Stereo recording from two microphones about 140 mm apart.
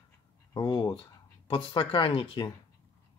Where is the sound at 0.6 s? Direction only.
30° left (ahead or behind).